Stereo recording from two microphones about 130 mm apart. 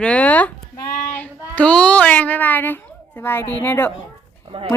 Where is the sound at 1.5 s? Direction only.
10° left (ahead or behind).